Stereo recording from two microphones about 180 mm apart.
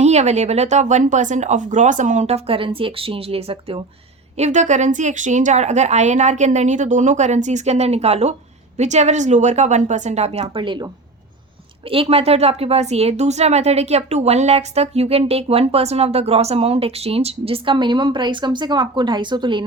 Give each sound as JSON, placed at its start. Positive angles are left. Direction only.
{"t": 0.0, "sound": "speech", "side_deg": -40}